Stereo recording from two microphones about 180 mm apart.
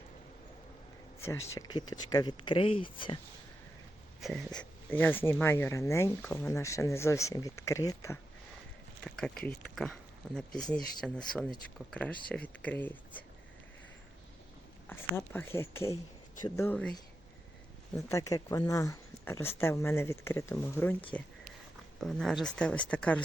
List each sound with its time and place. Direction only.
1.2 s speech: 15° left (ahead or behind)
4.2 s speech: centre (ahead or behind)
4.9 s speech: 10° left (ahead or behind)
9.0 s speech: 5° left (ahead or behind)
14.8 s speech: 10° left (ahead or behind)
17.9 s speech: 15° left (ahead or behind)